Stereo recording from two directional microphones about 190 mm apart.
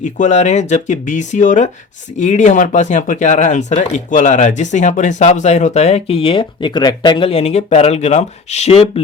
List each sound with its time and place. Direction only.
0.0 s speech: 40° left (ahead or behind)